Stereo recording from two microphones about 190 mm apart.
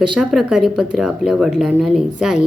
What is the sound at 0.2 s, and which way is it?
Speech, 5° right (ahead or behind).